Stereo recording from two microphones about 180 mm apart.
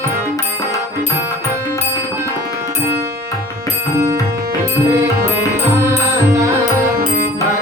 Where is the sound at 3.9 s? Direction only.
20° right (ahead or behind).